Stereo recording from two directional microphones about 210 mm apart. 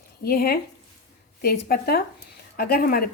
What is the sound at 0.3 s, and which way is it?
Speech, 45° left (ahead or behind).